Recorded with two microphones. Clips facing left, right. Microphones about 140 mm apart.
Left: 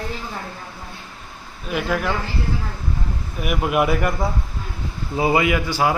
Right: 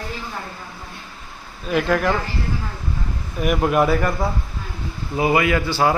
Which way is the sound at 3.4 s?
5° left (ahead or behind).